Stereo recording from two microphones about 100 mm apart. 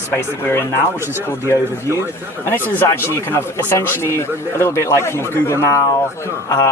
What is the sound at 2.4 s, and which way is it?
Speech, 20° left (ahead or behind).